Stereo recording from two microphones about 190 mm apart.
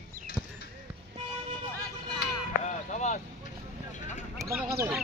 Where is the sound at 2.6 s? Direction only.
40° left (ahead or behind).